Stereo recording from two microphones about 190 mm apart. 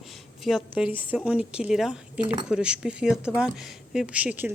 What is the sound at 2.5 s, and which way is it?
Speech, 5° right (ahead or behind).